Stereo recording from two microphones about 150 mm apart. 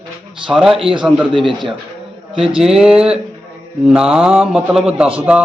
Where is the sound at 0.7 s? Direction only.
35° right (ahead or behind).